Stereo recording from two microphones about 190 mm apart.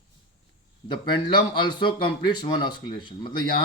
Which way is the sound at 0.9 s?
25° left (ahead or behind).